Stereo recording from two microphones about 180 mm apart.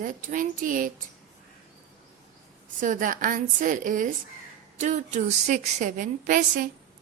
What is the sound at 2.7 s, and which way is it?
A woman's voice, 45° right (ahead or behind).